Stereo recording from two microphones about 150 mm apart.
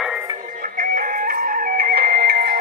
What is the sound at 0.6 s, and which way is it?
Music, 70° right (ahead or behind).